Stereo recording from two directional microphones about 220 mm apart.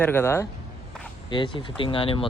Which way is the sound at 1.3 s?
25° left (ahead or behind).